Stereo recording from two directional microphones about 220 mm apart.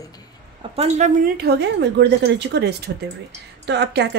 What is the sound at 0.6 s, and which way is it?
A woman's voice, 30° right (ahead or behind).